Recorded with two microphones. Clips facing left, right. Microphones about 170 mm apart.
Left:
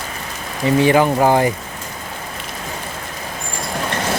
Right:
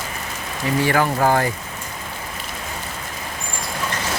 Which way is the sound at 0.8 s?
20° left (ahead or behind).